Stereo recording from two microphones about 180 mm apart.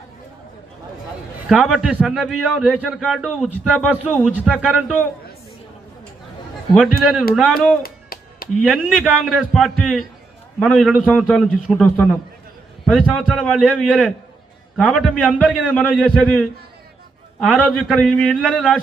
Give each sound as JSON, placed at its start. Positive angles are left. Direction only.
{"t": 1.5, "sound": "a man's voice", "side_deg": 0}
{"t": 6.7, "sound": "a man's voice", "side_deg": -5}
{"t": 7.8, "sound": "music", "side_deg": 55}
{"t": 8.6, "sound": "a man's voice", "side_deg": 0}